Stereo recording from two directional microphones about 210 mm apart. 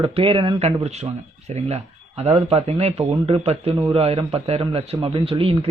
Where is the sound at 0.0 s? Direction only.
25° right (ahead or behind).